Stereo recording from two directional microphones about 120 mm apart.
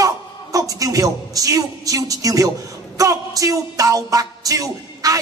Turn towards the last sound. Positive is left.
turn(degrees=-30)  # may be behind; listen again after turning